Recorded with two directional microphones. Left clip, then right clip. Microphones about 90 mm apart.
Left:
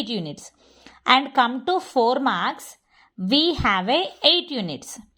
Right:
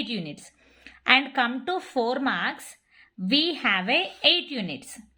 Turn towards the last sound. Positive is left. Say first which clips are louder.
# left 4 dB
turn(degrees=45)  # may be behind; listen again after turning